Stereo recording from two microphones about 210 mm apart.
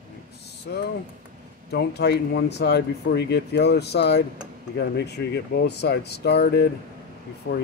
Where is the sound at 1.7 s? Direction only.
50° left (ahead or behind).